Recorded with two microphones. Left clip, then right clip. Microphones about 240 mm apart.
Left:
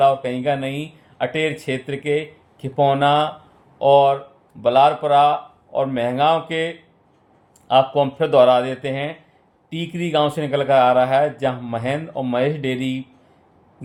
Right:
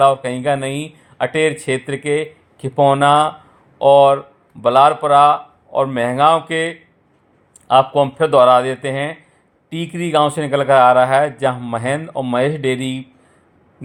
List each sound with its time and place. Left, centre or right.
0.0 s speech: centre